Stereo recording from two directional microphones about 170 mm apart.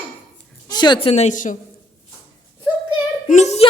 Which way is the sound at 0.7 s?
25° left (ahead or behind).